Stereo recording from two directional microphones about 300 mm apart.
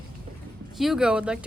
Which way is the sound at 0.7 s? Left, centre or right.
Centre.